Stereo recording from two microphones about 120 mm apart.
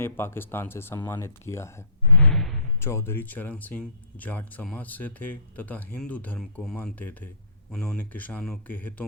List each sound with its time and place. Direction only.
0.0 s speech: 20° left (ahead or behind)
2.1 s a sound: 5° left (ahead or behind)
2.8 s speech: 20° left (ahead or behind)